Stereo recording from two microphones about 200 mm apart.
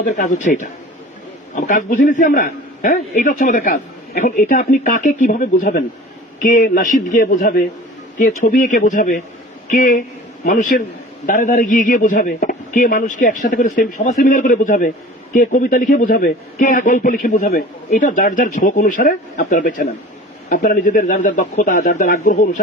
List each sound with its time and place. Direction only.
0.2 s a man's voice: 40° left (ahead or behind)